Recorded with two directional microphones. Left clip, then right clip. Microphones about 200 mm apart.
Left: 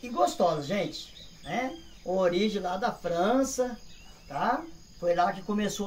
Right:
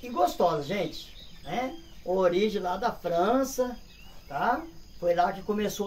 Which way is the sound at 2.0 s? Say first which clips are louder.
Right 2 dB; centre (ahead or behind).